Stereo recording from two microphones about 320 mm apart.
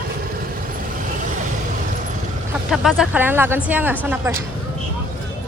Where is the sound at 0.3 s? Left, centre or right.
Right.